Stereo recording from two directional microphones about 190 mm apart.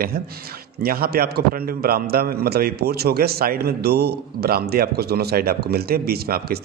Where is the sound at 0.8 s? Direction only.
55° right (ahead or behind).